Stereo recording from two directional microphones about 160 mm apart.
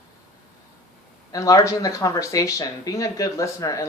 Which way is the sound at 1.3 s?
20° left (ahead or behind).